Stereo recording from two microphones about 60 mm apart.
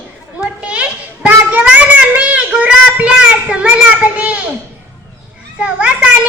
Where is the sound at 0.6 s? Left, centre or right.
Right.